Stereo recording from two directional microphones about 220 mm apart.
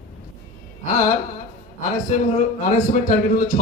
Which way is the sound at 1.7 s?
35° left (ahead or behind).